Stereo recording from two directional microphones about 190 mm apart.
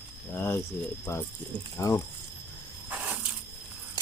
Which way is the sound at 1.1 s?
10° left (ahead or behind).